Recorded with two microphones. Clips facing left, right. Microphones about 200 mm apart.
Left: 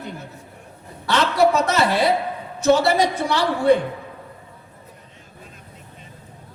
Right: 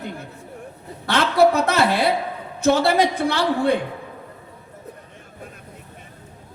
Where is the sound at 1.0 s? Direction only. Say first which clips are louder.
Right 1 dB; 55° right (ahead or behind).